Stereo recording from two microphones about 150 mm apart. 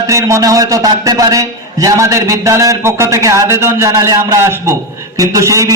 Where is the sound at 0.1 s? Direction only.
20° right (ahead or behind).